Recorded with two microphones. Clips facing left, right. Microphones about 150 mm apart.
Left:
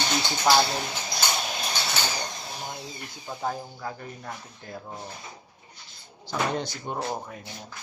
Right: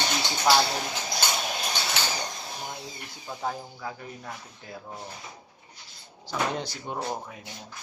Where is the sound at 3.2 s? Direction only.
5° left (ahead or behind).